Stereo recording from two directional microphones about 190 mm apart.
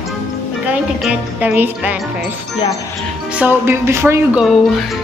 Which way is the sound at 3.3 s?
10° right (ahead or behind).